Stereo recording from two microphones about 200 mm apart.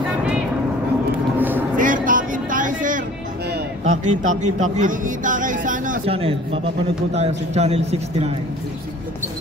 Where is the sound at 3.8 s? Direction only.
35° right (ahead or behind).